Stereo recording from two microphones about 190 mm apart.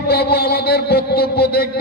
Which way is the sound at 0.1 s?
55° left (ahead or behind).